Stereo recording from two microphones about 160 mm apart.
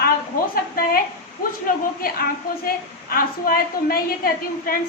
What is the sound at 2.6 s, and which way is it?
A woman's voice, 65° left (ahead or behind).